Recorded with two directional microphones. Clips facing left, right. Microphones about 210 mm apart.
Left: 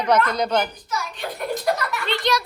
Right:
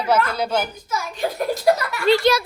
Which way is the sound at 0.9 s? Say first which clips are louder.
Right 4 dB; 45° right (ahead or behind).